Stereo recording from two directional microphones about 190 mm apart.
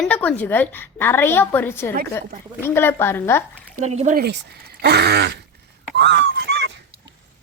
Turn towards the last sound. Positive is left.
turn(degrees=-60)  # may be behind; listen again after turning